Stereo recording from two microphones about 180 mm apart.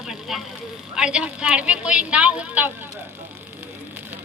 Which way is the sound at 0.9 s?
5° right (ahead or behind).